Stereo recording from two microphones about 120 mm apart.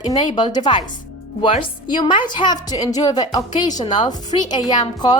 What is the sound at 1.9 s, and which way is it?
A woman's voice, 40° left (ahead or behind).